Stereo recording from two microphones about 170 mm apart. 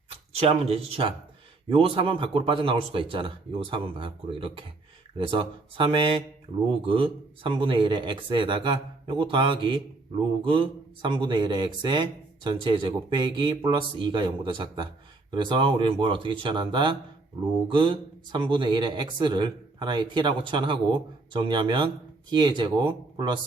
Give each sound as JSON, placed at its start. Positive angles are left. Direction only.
{"t": 0.1, "sound": "speech", "side_deg": -35}